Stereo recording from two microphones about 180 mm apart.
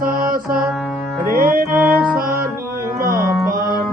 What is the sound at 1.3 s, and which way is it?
Music, 50° right (ahead or behind).